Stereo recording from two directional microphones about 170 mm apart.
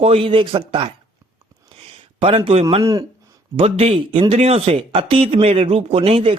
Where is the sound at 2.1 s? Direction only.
35° right (ahead or behind).